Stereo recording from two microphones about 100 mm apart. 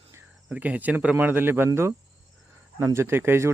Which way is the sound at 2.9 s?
25° right (ahead or behind).